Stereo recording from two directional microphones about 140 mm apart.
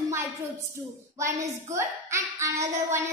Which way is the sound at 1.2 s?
20° right (ahead or behind).